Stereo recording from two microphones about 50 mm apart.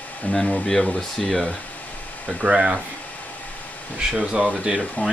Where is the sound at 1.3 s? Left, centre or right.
Centre.